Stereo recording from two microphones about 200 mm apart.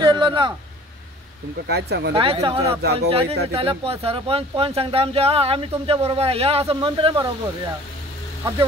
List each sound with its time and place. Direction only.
0.0 s a sound: 25° right (ahead or behind)
1.7 s speech: 55° right (ahead or behind)
2.1 s speech: 30° right (ahead or behind)